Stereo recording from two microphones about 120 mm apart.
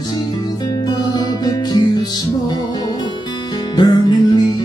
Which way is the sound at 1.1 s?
35° left (ahead or behind).